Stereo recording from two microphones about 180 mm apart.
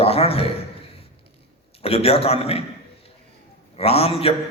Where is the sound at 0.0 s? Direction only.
35° left (ahead or behind).